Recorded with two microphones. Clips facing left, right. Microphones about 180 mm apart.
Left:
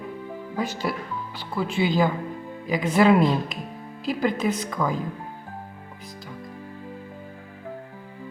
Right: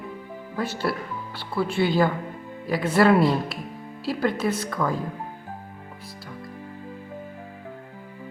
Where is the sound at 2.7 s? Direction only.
15° left (ahead or behind).